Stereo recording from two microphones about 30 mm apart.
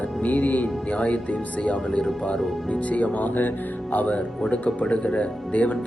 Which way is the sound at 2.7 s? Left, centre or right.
Left.